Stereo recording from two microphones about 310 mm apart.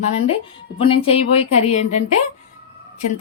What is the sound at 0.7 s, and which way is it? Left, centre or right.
Speech, centre.